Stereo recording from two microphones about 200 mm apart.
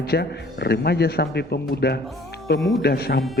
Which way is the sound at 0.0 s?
55° left (ahead or behind).